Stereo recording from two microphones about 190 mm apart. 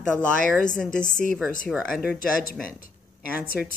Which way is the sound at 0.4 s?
45° left (ahead or behind).